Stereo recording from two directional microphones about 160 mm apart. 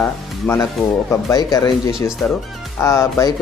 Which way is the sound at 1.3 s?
25° left (ahead or behind).